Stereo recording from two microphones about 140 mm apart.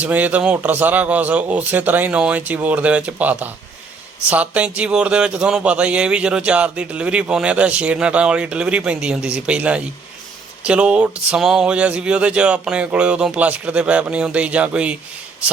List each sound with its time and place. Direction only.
0.0 s speech: 10° right (ahead or behind)